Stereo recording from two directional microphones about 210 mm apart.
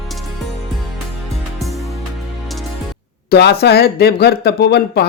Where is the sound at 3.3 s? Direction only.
50° left (ahead or behind).